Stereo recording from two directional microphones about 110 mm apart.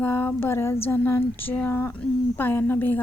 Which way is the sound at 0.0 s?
15° left (ahead or behind).